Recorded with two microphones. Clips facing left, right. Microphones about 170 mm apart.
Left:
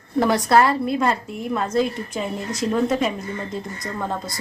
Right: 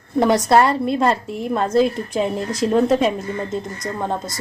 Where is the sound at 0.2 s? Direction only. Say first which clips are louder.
Right 2 dB; 20° right (ahead or behind).